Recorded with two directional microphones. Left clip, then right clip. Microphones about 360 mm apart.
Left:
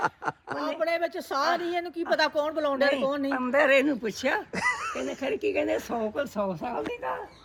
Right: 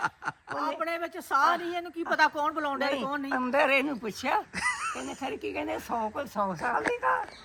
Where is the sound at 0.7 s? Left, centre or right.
Centre.